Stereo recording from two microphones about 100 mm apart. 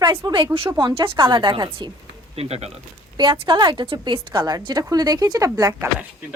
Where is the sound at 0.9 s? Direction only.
60° right (ahead or behind).